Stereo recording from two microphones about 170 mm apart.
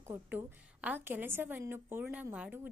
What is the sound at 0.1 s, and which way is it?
A woman's voice, 10° right (ahead or behind).